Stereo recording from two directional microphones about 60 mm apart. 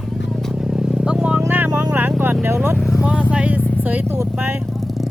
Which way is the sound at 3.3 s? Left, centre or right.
Right.